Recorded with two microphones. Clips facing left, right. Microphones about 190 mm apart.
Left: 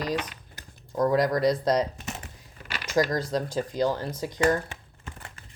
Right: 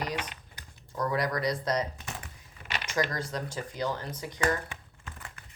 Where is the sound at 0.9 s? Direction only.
45° left (ahead or behind).